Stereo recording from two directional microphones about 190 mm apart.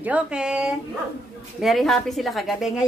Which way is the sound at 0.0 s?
5° right (ahead or behind).